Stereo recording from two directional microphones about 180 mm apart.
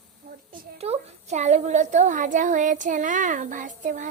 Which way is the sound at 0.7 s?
35° right (ahead or behind).